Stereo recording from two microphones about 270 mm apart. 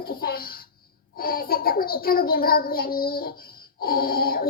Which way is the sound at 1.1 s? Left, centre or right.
Left.